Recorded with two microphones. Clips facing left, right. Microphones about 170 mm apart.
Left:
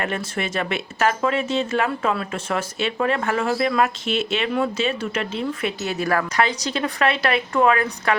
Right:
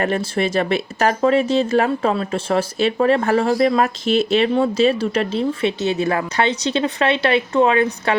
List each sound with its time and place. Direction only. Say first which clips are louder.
0.0 s a woman's voice: right 6 dB; 35° right (ahead or behind)